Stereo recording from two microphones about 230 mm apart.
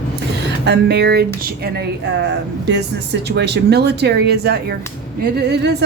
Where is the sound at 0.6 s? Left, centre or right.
Right.